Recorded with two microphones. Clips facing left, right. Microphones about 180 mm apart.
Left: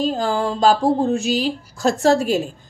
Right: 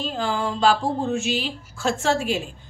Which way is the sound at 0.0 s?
40° left (ahead or behind).